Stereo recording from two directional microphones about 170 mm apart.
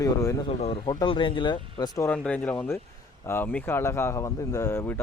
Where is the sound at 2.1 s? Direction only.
10° left (ahead or behind).